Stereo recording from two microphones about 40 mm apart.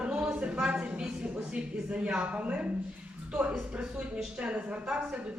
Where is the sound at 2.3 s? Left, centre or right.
Right.